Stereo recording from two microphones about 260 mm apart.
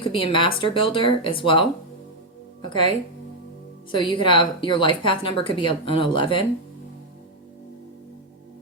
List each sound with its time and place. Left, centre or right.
0.0 s a woman's voice: centre
3.9 s a woman's voice: centre